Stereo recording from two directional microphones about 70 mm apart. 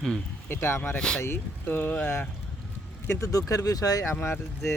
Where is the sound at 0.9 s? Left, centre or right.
Centre.